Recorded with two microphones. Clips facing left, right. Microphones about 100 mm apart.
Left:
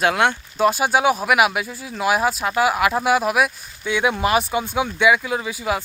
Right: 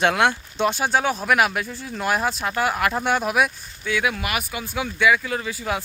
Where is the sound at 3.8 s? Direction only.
25° left (ahead or behind).